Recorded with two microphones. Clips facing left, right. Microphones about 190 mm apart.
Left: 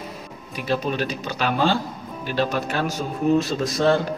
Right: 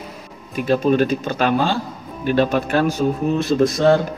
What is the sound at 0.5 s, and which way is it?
A man's voice, 50° right (ahead or behind).